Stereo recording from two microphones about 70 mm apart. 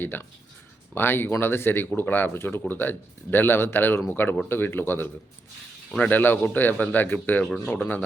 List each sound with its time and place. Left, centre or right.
0.0 s speech: left